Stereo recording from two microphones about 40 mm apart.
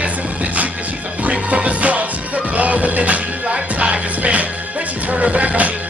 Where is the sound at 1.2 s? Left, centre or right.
Right.